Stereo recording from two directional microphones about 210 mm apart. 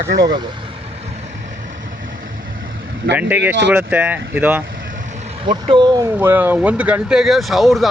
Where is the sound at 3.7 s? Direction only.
10° right (ahead or behind).